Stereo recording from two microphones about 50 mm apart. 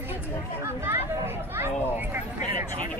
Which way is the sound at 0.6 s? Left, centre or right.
Right.